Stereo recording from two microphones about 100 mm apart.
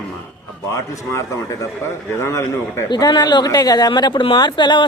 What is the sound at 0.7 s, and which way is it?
A man's voice, 30° left (ahead or behind).